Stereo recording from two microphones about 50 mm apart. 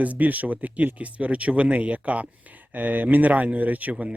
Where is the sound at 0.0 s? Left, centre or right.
Right.